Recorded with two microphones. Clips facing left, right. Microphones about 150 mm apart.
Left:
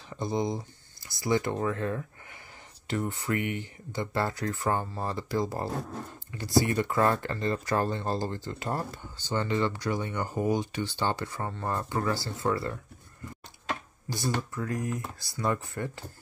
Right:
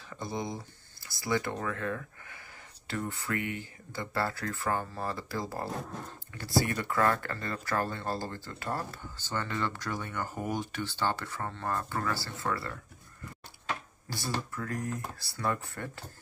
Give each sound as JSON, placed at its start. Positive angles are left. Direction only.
{"t": 0.1, "sound": "speech", "side_deg": 20}
{"t": 14.0, "sound": "speech", "side_deg": 15}